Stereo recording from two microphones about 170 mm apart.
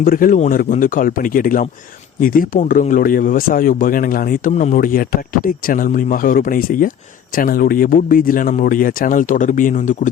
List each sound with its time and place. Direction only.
0.0 s speech: 55° left (ahead or behind)